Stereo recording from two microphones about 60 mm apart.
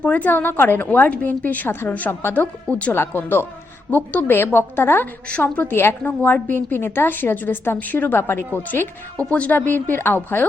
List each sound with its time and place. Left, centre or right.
0.0 s a woman's voice: left
2.6 s a woman's voice: left
2.9 s a woman's voice: left
4.4 s a woman's voice: left
9.3 s a woman's voice: left
9.6 s a woman's voice: left